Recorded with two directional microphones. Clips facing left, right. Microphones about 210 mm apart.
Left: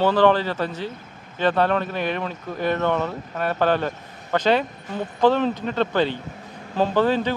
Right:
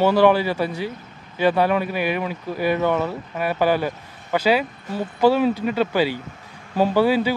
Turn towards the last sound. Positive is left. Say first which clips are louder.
# right 2 dB
turn(degrees=-10)  # may be behind; listen again after turning